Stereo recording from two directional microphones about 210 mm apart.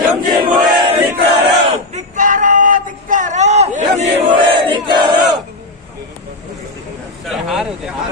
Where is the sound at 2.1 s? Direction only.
40° right (ahead or behind); by 5.1 s 20° right (ahead or behind).